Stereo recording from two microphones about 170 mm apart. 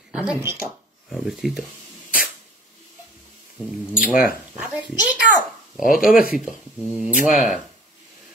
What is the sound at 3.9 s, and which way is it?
Speech, 5° right (ahead or behind).